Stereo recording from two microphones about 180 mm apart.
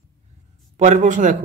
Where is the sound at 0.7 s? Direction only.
40° right (ahead or behind).